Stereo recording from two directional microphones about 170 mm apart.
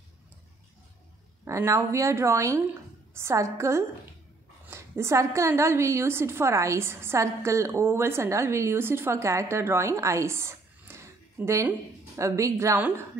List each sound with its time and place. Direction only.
1.4 s a woman's voice: 15° right (ahead or behind)